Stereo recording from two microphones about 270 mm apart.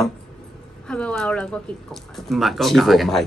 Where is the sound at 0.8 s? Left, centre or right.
Centre.